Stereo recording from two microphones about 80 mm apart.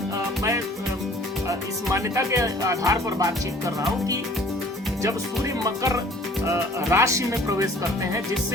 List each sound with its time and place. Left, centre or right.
1.5 s speech: right
5.0 s speech: right